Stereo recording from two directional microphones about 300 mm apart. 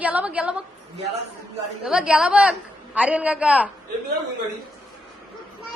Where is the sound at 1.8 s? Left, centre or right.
Centre.